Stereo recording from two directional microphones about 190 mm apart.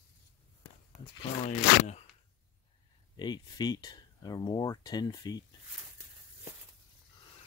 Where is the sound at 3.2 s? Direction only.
20° left (ahead or behind).